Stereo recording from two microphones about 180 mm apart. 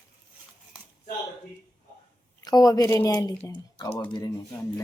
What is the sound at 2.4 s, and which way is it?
Speech, 20° left (ahead or behind).